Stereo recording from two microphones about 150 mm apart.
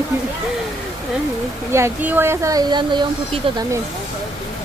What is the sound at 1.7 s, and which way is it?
Speech, 15° right (ahead or behind).